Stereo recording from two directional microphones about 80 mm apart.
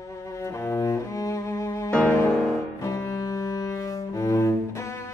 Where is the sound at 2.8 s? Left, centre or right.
Left.